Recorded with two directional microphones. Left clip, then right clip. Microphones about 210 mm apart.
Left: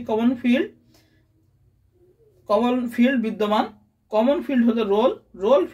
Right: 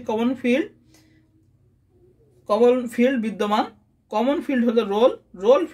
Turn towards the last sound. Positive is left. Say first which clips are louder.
# right 1 dB
turn(degrees=-50)  # may be behind; listen again after turning